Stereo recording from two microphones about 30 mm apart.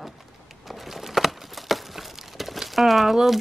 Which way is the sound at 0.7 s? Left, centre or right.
Centre.